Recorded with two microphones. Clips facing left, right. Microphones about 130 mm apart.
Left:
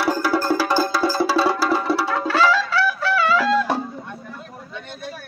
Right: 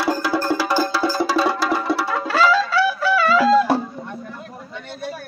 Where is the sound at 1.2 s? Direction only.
10° left (ahead or behind).